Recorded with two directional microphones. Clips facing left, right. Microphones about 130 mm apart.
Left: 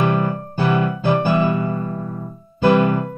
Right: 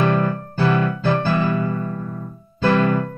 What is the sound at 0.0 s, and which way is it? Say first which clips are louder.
Music: even; 15° left (ahead or behind).